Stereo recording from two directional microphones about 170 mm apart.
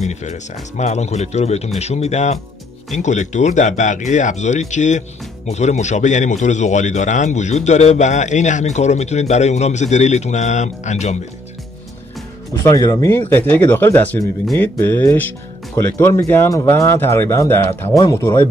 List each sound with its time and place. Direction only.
0.0 s a man's voice: 45° left (ahead or behind)
12.6 s speech: 20° left (ahead or behind); by 14.7 s centre (ahead or behind)
14.8 s speech: 10° left (ahead or behind)